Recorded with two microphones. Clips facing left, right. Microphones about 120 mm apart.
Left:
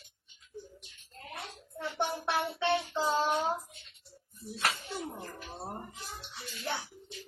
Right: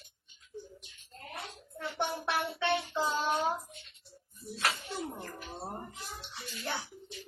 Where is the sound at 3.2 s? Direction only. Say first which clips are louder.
Left 2 dB; centre (ahead or behind).